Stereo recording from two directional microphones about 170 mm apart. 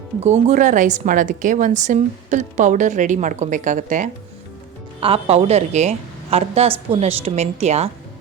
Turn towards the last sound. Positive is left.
turn(degrees=-40)  # may be behind; listen again after turning